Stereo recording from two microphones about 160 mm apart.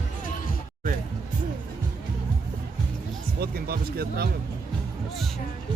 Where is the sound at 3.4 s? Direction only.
75° right (ahead or behind).